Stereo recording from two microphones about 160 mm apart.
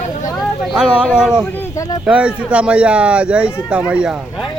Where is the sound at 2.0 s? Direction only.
5° right (ahead or behind).